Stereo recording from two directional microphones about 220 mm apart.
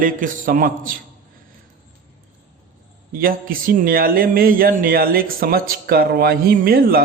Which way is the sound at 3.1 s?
40° right (ahead or behind).